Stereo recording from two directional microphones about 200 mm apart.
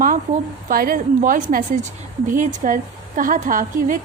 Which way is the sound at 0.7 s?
45° right (ahead or behind).